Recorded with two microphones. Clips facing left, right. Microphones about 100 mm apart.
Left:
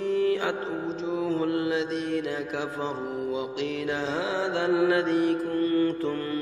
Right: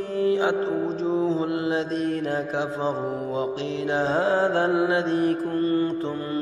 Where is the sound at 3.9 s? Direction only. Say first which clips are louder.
Right 11 dB; 35° right (ahead or behind).